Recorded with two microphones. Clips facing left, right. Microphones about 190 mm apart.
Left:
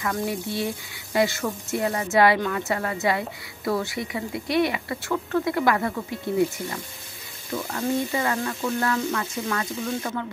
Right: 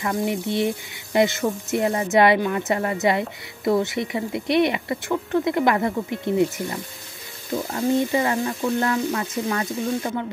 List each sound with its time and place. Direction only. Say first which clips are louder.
0.0 s speech: right 3 dB; 20° right (ahead or behind)